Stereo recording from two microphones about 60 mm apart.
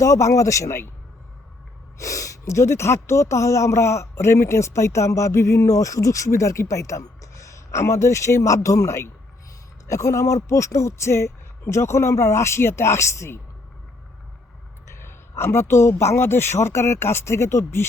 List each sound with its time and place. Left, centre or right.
0.0 s speech: left
2.0 s speech: left
14.8 s speech: left